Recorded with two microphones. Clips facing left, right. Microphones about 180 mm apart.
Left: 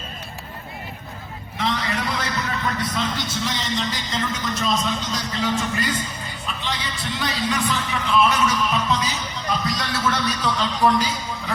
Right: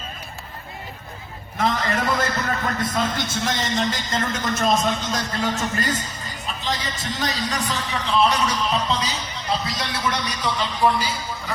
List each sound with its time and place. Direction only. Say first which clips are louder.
1.5 s a man's voice: right 3 dB; 45° right (ahead or behind); by 11.5 s 10° right (ahead or behind)